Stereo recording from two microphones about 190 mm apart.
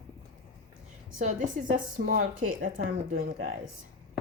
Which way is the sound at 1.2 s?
45° right (ahead or behind).